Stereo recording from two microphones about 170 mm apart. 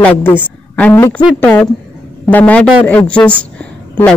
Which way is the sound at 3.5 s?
5° left (ahead or behind).